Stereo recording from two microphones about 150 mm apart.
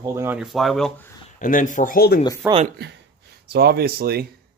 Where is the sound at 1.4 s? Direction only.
60° left (ahead or behind); by 2.1 s 80° left.